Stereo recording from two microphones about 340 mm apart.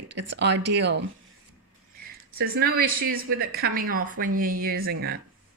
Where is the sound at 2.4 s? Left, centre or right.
Right.